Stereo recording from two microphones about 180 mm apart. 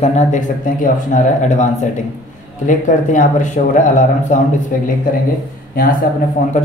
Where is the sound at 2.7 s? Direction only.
45° left (ahead or behind).